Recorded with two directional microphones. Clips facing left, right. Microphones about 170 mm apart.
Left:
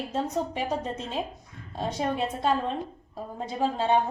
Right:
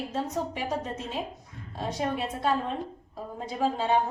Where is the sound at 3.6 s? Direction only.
25° left (ahead or behind).